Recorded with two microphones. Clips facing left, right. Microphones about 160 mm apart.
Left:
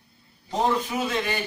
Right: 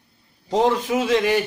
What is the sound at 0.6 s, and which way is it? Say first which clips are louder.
Speech: right 4 dB; 85° right.